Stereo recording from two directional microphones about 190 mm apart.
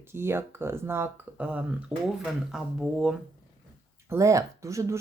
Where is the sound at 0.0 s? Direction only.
15° right (ahead or behind).